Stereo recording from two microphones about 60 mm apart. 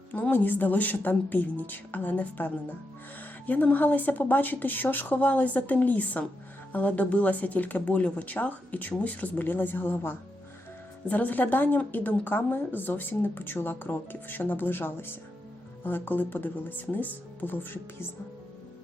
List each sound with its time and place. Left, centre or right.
0.1 s speech: left
11.1 s speech: left